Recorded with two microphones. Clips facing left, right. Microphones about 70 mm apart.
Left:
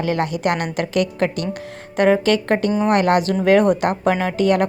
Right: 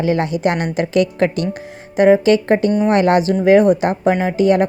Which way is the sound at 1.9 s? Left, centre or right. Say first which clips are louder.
Right 4 dB; centre.